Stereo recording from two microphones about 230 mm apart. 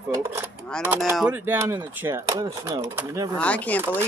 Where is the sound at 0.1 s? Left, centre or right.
Centre.